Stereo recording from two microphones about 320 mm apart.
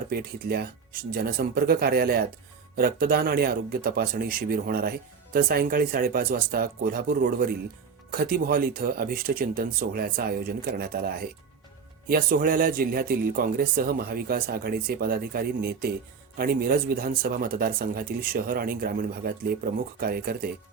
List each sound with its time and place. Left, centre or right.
0.1 s speech: right